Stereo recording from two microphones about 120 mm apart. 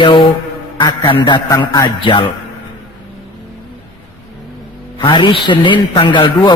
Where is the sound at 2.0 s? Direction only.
45° left (ahead or behind).